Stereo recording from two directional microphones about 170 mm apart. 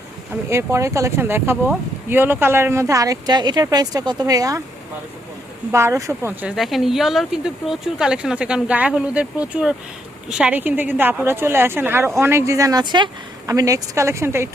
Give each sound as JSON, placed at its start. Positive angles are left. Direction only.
{"t": 0.5, "sound": "speech", "side_deg": -15}
{"t": 5.7, "sound": "speech", "side_deg": -15}
{"t": 6.6, "sound": "speech", "side_deg": 0}